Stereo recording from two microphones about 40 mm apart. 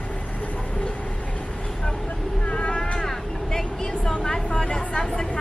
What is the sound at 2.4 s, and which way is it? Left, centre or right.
Cat, left.